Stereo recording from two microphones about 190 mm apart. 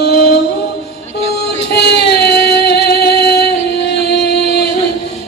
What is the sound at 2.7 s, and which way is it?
Music, 60° left (ahead or behind).